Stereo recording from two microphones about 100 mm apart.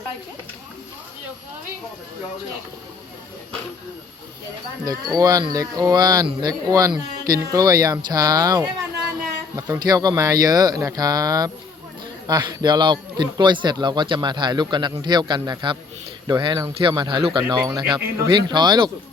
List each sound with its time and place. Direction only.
4.9 s speech: 40° right (ahead or behind)
9.7 s a man's voice: 40° right (ahead or behind)